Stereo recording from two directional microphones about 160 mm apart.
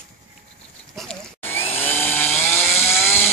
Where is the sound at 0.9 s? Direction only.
5° left (ahead or behind).